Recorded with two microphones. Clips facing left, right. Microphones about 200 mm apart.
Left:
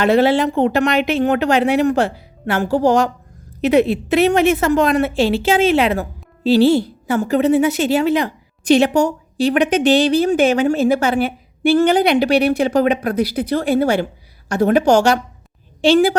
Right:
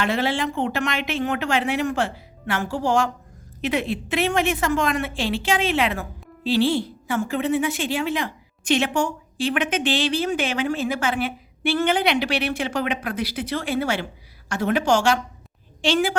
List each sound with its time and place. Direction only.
0.0 s a woman's voice: 40° left (ahead or behind)